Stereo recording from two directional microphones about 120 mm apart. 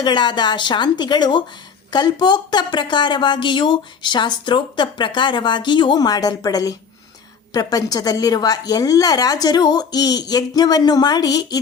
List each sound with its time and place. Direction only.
0.0 s speech: 40° left (ahead or behind)